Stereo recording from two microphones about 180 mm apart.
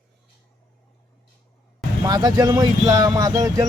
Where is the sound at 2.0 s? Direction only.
20° right (ahead or behind).